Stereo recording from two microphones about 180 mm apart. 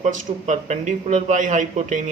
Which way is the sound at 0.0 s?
45° right (ahead or behind).